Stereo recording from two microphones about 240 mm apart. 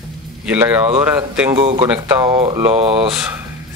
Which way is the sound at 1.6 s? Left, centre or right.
Right.